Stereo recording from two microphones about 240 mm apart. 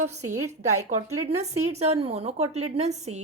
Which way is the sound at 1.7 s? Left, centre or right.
Right.